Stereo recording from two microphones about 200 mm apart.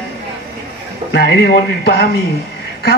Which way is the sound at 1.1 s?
50° left (ahead or behind).